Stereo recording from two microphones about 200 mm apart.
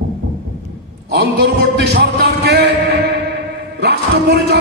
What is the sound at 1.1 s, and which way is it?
Speech, 55° right (ahead or behind).